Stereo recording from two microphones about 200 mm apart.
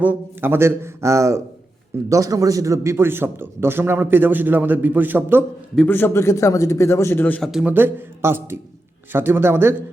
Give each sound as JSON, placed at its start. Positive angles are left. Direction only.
{"t": 0.0, "sound": "a man's voice", "side_deg": -10}
{"t": 5.7, "sound": "a man's voice", "side_deg": 10}